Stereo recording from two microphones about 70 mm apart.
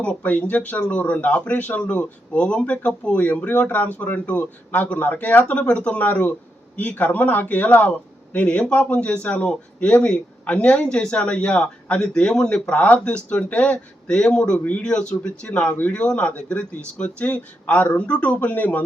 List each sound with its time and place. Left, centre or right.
0.0 s a man's voice: left